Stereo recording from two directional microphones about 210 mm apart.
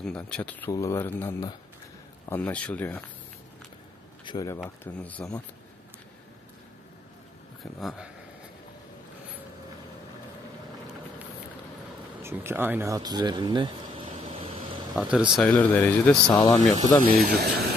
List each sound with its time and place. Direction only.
0.0 s speech: 5° left (ahead or behind)
4.2 s speech: 20° left (ahead or behind)
4.6 s speech: 5° left (ahead or behind)
12.2 s speech: 10° right (ahead or behind)
15.0 s speech: 5° right (ahead or behind)
15.3 s speech: 5° left (ahead or behind)
16.3 s speech: 15° left (ahead or behind)
17.3 s speech: 50° right (ahead or behind)